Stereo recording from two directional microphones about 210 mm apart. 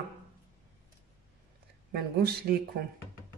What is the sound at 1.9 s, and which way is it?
Speech, 50° right (ahead or behind).